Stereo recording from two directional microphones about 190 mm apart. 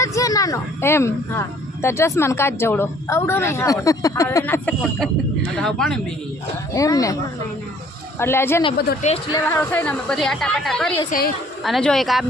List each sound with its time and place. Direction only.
0.0 s a woman's voice: 15° left (ahead or behind)
6.7 s speech: 15° left (ahead or behind)
8.2 s speech: 10° left (ahead or behind)
9.0 s a woman's voice: 35° left (ahead or behind)
9.3 s a woman's voice: 10° left (ahead or behind)